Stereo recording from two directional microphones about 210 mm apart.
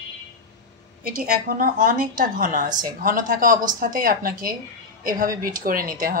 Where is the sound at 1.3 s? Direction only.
45° right (ahead or behind).